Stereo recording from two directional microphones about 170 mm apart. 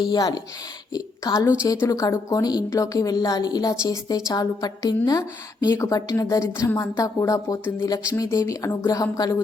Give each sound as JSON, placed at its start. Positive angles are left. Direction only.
{"t": 0.0, "sound": "speech", "side_deg": 25}